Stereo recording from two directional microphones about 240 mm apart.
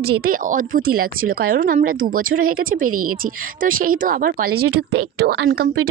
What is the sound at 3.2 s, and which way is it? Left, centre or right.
A woman's voice, right.